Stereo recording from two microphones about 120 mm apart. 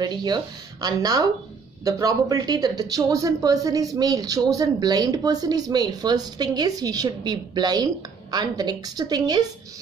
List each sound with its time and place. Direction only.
0.0 s speech: 35° right (ahead or behind)